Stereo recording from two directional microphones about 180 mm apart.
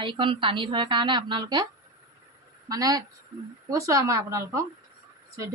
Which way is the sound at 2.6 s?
20° right (ahead or behind).